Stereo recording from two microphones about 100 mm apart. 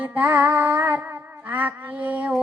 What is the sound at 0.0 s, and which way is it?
Music, 15° right (ahead or behind).